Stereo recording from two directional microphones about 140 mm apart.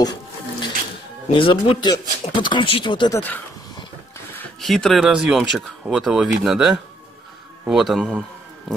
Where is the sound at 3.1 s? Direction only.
15° left (ahead or behind).